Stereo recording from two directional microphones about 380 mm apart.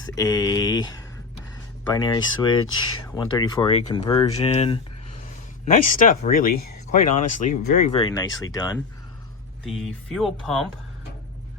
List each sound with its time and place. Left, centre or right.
0.2 s speech: centre
9.6 s speech: centre